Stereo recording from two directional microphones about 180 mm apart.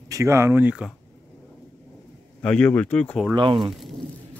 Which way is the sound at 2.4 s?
5° left (ahead or behind).